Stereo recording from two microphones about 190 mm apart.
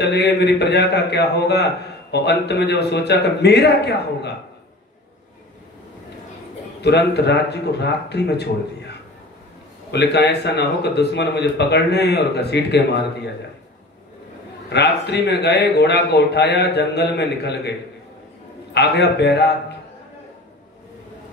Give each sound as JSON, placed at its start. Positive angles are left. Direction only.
{"t": 0.0, "sound": "a man's voice", "side_deg": 60}
{"t": 6.8, "sound": "a man's voice", "side_deg": 60}
{"t": 9.8, "sound": "a man's voice", "side_deg": 60}
{"t": 14.7, "sound": "a man's voice", "side_deg": 60}